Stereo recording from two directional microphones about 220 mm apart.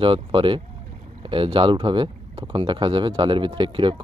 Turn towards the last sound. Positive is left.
turn(degrees=-20)  # may be behind; listen again after turning